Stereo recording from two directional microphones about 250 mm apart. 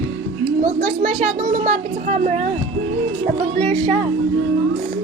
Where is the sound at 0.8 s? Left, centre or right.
Right.